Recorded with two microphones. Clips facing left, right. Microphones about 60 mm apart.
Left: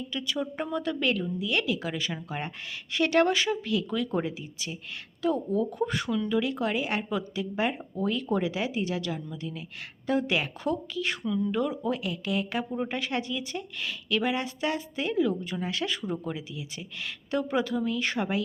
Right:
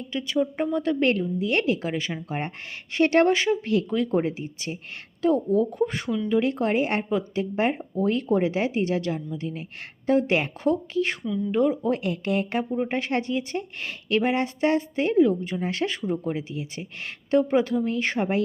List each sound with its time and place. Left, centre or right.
0.1 s a woman's voice: right
11.9 s a woman's voice: right